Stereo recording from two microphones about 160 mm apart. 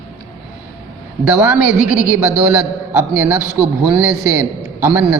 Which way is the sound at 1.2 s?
5° right (ahead or behind).